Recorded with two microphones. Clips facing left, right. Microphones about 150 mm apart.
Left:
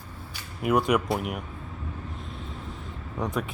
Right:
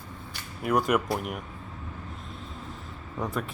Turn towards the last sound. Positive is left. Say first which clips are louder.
# left 2 dB
turn(degrees=0)  # may be behind; listen again after turning